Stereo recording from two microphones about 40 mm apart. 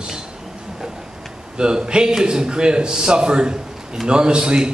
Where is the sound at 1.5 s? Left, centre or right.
Right.